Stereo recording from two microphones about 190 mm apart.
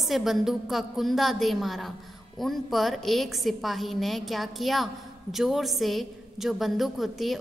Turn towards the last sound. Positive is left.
turn(degrees=0)  # may be behind; listen again after turning